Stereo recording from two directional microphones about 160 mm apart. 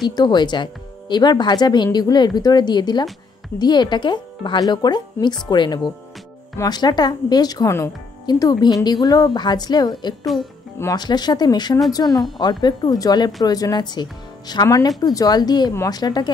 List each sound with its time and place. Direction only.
0.1 s speech: 25° left (ahead or behind)